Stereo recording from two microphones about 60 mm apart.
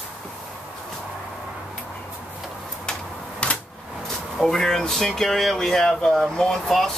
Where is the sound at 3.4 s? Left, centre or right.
Centre.